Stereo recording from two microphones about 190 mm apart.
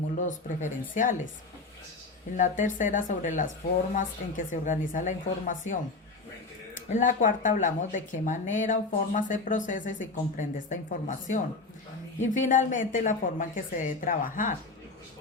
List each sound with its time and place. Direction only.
0.3 s speech: 40° left (ahead or behind)
2.3 s speech: 40° left (ahead or behind)
6.9 s speech: 45° left (ahead or behind)